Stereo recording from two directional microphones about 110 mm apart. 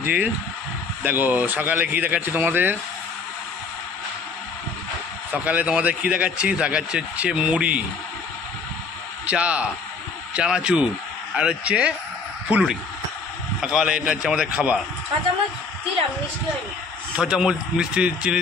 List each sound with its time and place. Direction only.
0.0 s a man's voice: 15° right (ahead or behind)
5.3 s a man's voice: 15° right (ahead or behind)
9.2 s a man's voice: 10° right (ahead or behind)
13.6 s a man's voice: 5° right (ahead or behind)
17.2 s a man's voice: 5° right (ahead or behind)